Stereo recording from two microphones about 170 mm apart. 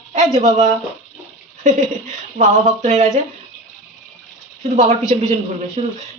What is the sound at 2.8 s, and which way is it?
Speech, 40° right (ahead or behind).